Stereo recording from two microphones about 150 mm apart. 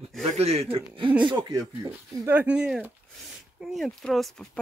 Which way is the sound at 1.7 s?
15° right (ahead or behind).